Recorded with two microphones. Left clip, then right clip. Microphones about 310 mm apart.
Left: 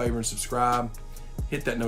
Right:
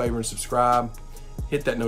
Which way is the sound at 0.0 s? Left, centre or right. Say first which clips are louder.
Right 2 dB; centre.